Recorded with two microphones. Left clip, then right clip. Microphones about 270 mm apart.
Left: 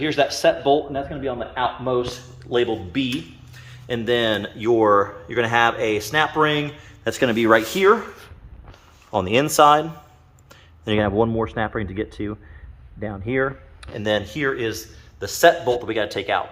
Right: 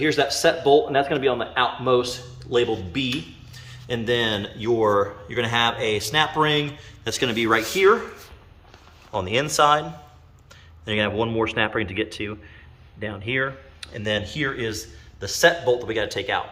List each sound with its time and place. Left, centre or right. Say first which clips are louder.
0.0 s a man's voice: left 1 dB; centre; by 7.9 s left
9.1 s speech: left 4 dB; left
10.8 s speech: left 3 dB; left